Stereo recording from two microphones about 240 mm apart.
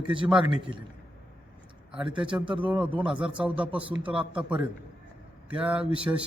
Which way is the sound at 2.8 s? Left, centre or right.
Right.